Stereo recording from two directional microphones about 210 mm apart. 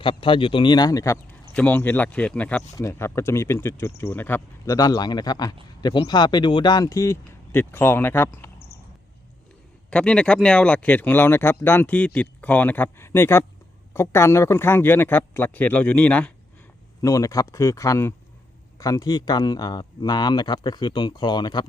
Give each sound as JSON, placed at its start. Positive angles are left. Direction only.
{"t": 0.0, "sound": "speech", "side_deg": 25}
{"t": 9.9, "sound": "speech", "side_deg": 5}